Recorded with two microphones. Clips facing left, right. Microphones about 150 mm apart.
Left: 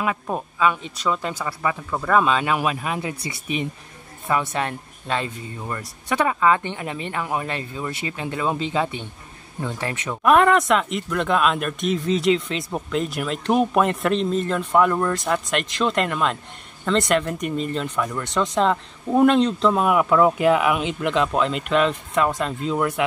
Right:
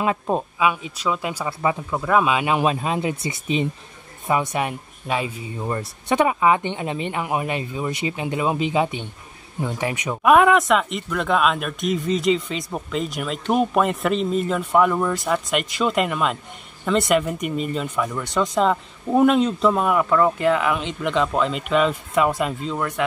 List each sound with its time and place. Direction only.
0.0 s speech: 25° right (ahead or behind)
0.6 s speech: 10° right (ahead or behind); by 3.6 s 25° right (ahead or behind)
4.3 s speech: 15° right (ahead or behind)
5.7 s speech: 25° right (ahead or behind); by 23.0 s 5° left (ahead or behind)